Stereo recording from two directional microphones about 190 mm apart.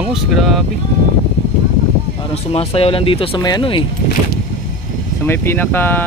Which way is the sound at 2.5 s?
30° left (ahead or behind).